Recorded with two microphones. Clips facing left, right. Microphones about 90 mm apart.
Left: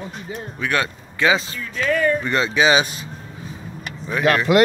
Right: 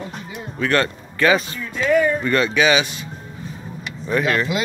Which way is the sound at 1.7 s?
10° right (ahead or behind).